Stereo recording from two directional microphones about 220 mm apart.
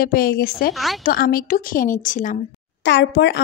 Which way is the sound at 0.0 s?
45° left (ahead or behind).